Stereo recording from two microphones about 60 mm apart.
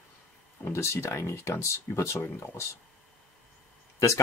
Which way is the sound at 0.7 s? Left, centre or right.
Left.